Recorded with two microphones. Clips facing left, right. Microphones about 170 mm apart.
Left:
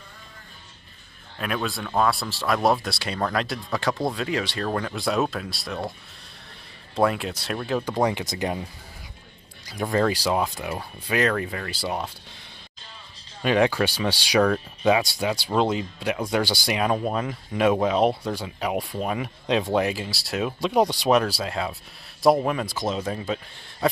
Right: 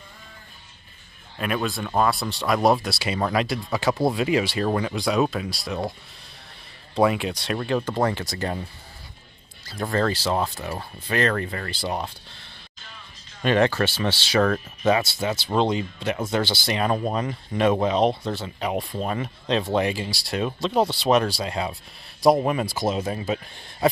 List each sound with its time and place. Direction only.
1.4 s speech: centre (ahead or behind)
7.0 s speech: centre (ahead or behind)
7.9 s speech: 15° left (ahead or behind)
9.8 s speech: 10° left (ahead or behind)
13.4 s speech: 5° left (ahead or behind)
14.4 s speech: centre (ahead or behind)
15.0 s speech: 10° left (ahead or behind)
21.3 s a man's voice: centre (ahead or behind)